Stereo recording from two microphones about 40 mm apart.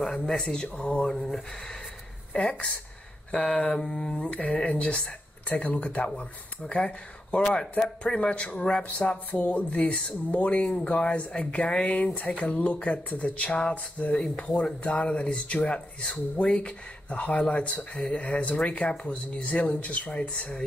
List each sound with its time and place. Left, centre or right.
0.0 s speech: centre
1.1 s speech: centre
2.3 s speech: left
3.3 s a sound: centre
3.8 s speech: left
5.5 s speech: left
8.8 s speech: left